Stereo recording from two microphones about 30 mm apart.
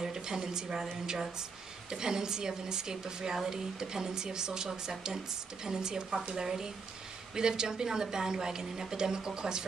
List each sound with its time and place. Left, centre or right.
0.0 s a woman's voice: right
1.9 s speech: right